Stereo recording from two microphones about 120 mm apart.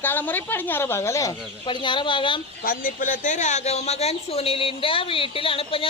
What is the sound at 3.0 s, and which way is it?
Speech, 90° left.